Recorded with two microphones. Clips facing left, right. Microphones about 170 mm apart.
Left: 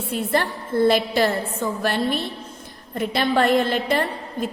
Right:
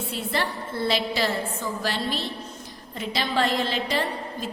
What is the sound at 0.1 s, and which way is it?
A woman's voice, 50° left (ahead or behind).